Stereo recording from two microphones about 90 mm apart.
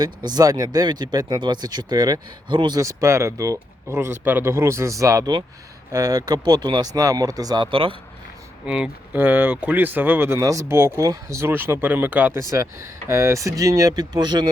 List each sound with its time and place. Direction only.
0.3 s speech: 45° right (ahead or behind)
3.9 s speech: 25° right (ahead or behind); by 7.0 s 50° right (ahead or behind)
7.0 s speech: 40° right (ahead or behind)
7.7 s speech: 75° right (ahead or behind)
8.6 s speech: 15° right (ahead or behind); by 11.5 s 30° right (ahead or behind)
11.5 s speech: 20° right (ahead or behind)
12.4 s speech: 35° right (ahead or behind); by 14.5 s 50° right (ahead or behind)